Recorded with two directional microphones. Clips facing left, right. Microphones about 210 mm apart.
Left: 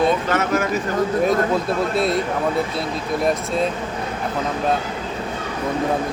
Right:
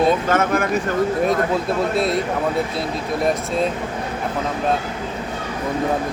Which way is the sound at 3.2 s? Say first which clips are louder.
Even; centre (ahead or behind).